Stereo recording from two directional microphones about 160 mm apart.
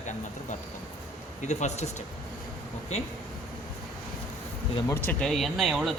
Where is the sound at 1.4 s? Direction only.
45° left (ahead or behind).